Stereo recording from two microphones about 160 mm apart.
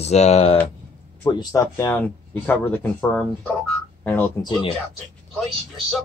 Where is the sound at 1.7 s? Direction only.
15° left (ahead or behind).